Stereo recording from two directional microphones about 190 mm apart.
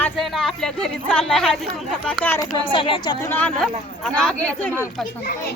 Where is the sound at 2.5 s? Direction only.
25° left (ahead or behind).